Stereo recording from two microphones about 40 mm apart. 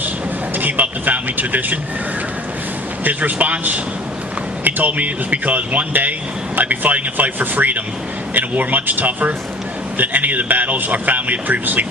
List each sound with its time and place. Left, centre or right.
0.5 s a man's voice: right
3.0 s a man's voice: right